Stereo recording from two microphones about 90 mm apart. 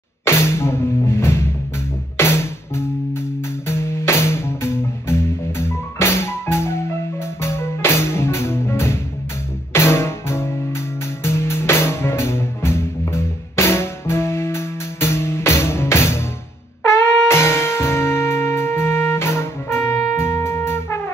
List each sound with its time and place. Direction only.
0.2 s music: 30° left (ahead or behind)